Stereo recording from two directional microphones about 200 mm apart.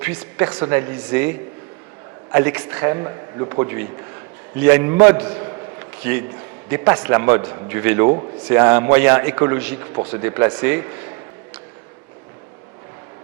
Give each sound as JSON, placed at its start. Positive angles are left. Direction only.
{"t": 0.0, "sound": "a man's voice", "side_deg": -10}
{"t": 2.3, "sound": "a man's voice", "side_deg": -10}
{"t": 6.7, "sound": "a man's voice", "side_deg": -15}
{"t": 9.9, "sound": "speech", "side_deg": -25}
{"t": 10.2, "sound": "a man's voice", "side_deg": -15}